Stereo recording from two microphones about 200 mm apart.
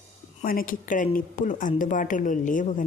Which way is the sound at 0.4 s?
45° left (ahead or behind).